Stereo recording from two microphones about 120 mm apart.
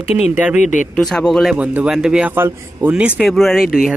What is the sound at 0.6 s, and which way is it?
Speech, 90° left.